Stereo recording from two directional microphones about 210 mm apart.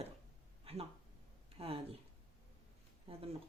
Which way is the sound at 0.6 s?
25° right (ahead or behind).